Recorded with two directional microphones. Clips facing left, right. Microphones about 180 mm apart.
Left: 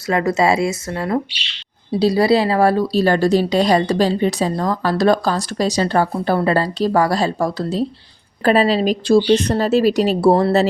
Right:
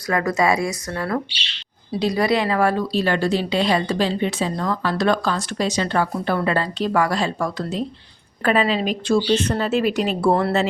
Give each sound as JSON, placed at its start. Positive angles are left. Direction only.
{"t": 0.1, "sound": "a woman's voice", "side_deg": 25}